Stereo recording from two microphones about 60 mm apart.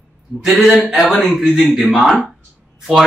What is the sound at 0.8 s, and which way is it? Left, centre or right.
Speech, centre.